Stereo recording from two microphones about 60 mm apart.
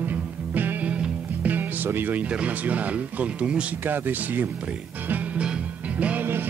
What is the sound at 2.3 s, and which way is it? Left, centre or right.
Speech, right.